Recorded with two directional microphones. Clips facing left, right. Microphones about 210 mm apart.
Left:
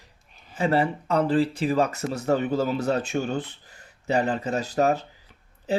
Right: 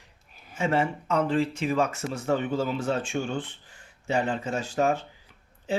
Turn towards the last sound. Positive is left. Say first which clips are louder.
# left 3 dB
turn(degrees=40)  # may be behind; listen again after turning